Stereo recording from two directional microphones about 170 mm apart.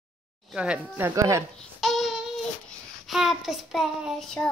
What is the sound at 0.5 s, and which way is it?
Speech, 5° right (ahead or behind).